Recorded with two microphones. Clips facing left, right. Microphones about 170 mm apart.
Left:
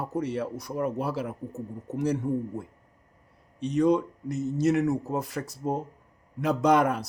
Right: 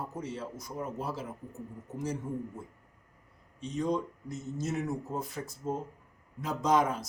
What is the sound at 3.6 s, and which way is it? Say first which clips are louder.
A man's voice: left 8 dB; 70° left (ahead or behind).